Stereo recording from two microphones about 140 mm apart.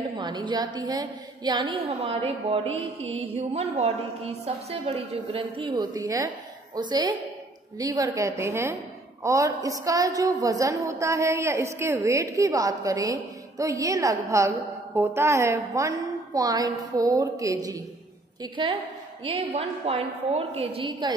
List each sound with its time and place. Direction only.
0.2 s a woman's voice: 35° right (ahead or behind)
18.4 s a woman's voice: 35° right (ahead or behind)